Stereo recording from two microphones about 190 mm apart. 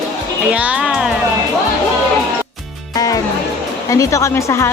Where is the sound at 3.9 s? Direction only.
15° left (ahead or behind).